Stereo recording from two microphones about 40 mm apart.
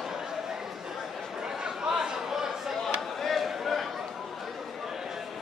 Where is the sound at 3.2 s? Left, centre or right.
Centre.